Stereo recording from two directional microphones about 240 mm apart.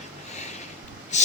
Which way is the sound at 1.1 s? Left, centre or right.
Left.